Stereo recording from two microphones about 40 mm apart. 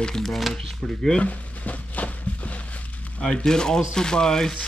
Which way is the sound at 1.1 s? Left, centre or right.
Left.